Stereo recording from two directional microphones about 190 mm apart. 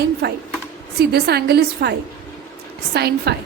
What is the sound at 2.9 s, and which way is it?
Speech, 60° right (ahead or behind).